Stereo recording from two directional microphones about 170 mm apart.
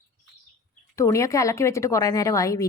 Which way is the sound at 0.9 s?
20° left (ahead or behind).